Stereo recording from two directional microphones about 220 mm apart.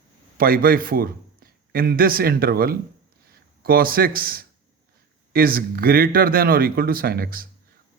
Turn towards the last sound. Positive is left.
turn(degrees=-40)  # may be behind; listen again after turning